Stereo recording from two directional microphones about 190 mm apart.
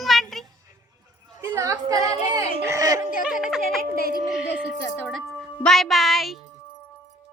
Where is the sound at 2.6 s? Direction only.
15° right (ahead or behind).